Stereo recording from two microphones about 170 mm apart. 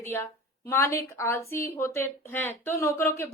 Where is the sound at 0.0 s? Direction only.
15° left (ahead or behind).